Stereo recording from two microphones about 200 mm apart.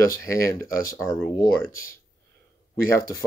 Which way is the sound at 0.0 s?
15° left (ahead or behind).